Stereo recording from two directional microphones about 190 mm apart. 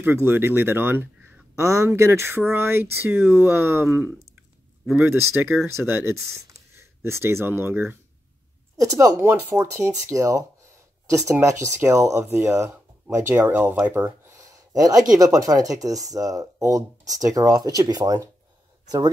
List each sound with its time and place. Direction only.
0.0 s speech: 10° right (ahead or behind)